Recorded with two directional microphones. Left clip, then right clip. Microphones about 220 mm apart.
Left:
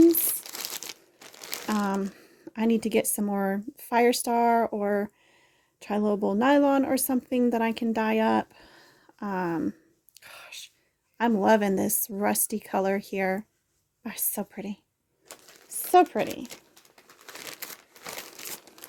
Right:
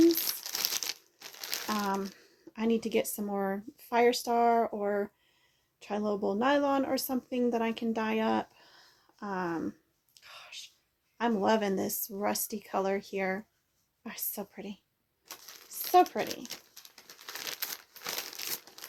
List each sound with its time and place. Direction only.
0.1 s crumpling: 15° left (ahead or behind)
1.6 s speech: 55° left (ahead or behind)
10.2 s whispering: 50° left (ahead or behind)
11.2 s speech: 50° left (ahead or behind)
15.3 s a sound: 10° left (ahead or behind)
15.9 s speech: 55° left (ahead or behind)
16.2 s speech: 20° left (ahead or behind)
16.9 s crumpling: 15° left (ahead or behind)